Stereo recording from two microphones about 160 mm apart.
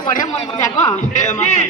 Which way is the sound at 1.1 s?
50° left (ahead or behind).